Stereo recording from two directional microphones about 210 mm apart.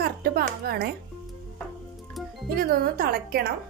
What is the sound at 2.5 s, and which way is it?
Speech, 45° right (ahead or behind).